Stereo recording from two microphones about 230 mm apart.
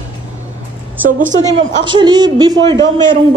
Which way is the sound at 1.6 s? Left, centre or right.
Right.